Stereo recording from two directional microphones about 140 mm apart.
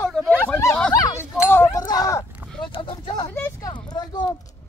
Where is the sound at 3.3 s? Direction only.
15° left (ahead or behind).